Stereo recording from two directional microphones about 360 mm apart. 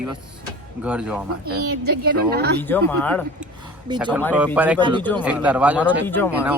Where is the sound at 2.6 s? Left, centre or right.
Centre.